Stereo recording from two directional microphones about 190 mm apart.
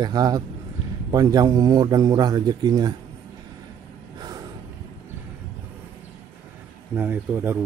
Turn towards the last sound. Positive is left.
turn(degrees=-10)  # may be behind; listen again after turning